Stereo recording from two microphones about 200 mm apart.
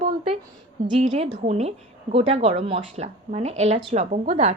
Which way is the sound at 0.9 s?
35° right (ahead or behind).